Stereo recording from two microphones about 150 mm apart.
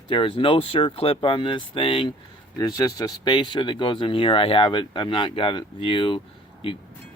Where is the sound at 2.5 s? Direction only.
25° left (ahead or behind).